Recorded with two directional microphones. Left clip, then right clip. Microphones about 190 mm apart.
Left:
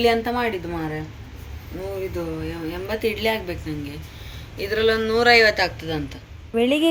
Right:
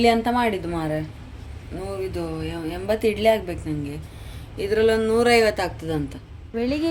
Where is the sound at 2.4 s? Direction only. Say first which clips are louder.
Even; 65° right (ahead or behind).